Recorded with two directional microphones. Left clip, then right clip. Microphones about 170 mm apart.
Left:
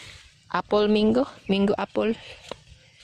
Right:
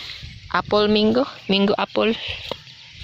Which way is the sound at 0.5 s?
40° left (ahead or behind).